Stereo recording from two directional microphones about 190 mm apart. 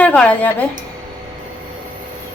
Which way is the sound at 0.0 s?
5° left (ahead or behind).